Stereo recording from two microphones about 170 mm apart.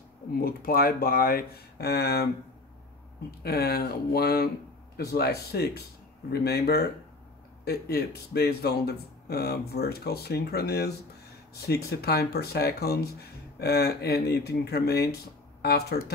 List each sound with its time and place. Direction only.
0.4 s speech: 60° left (ahead or behind)
3.4 s speech: 65° left (ahead or behind)